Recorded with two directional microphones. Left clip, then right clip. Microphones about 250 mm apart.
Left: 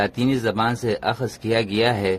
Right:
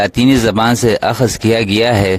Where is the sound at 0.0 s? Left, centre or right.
Right.